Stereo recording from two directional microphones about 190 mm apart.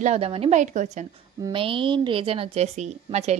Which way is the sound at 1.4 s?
25° right (ahead or behind).